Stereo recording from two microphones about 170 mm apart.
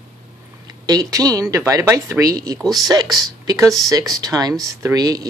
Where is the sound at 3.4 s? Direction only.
20° right (ahead or behind).